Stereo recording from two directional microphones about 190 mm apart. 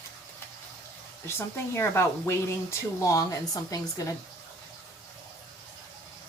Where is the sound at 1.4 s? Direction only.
15° left (ahead or behind).